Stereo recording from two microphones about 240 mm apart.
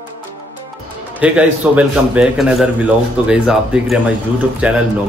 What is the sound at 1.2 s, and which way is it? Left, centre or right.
A man's voice, centre.